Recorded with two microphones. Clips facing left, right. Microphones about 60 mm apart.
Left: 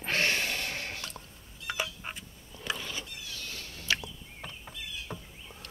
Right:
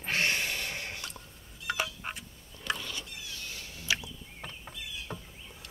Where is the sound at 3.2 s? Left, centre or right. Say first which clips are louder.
Left 1 dB; right; by 5.2 s centre.